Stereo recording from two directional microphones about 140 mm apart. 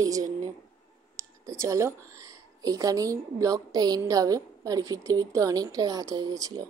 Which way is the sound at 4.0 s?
25° right (ahead or behind).